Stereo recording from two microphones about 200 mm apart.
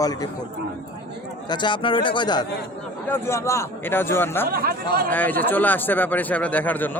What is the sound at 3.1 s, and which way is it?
Speech, 10° left (ahead or behind).